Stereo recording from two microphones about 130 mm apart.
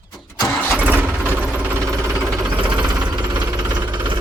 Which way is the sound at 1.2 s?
15° right (ahead or behind).